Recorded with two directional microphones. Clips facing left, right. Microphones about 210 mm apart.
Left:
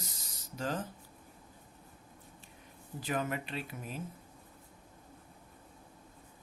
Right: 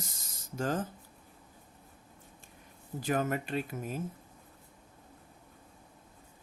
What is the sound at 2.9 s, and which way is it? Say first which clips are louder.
Speech: right 4 dB; 45° right (ahead or behind).